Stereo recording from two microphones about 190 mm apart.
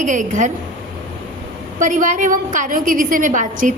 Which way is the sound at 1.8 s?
40° right (ahead or behind).